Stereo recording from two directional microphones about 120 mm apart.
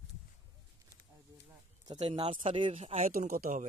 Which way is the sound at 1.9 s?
45° right (ahead or behind).